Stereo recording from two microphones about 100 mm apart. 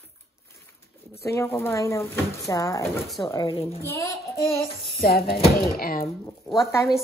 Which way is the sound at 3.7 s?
30° left (ahead or behind).